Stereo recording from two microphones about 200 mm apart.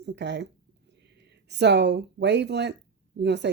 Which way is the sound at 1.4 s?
60° right (ahead or behind).